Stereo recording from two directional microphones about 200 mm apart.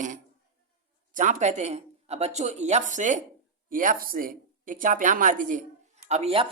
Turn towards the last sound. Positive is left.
turn(degrees=-30)  # may be behind; listen again after turning